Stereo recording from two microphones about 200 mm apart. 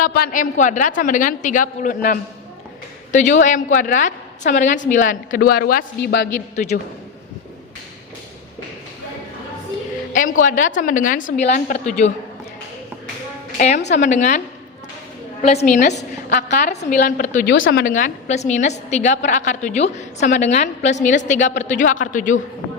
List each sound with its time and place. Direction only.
0.0 s a woman's voice: 45° left (ahead or behind)
10.1 s a woman's voice: 40° left (ahead or behind)
13.6 s a woman's voice: 35° left (ahead or behind)
17.5 s speech: 65° left (ahead or behind)
17.7 s a woman's voice: 40° left (ahead or behind)